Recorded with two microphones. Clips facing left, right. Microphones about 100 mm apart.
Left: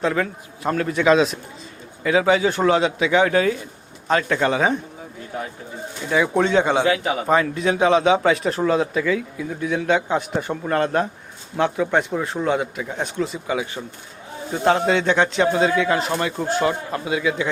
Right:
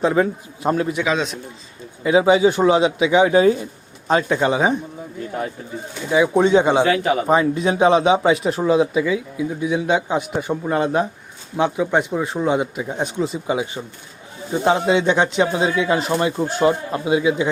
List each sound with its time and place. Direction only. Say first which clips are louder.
0.0 s a man's voice: right 4 dB; 20° right (ahead or behind)
1.0 s a man's voice: left 5 dB; centre (ahead or behind)
2.0 s a man's voice: right 3 dB; 20° right (ahead or behind)
6.1 s a man's voice: right 4 dB; 15° right (ahead or behind)
6.8 s a man's voice: right 2 dB; 5° left (ahead or behind)
7.3 s a man's voice: left 1 dB; 20° right (ahead or behind)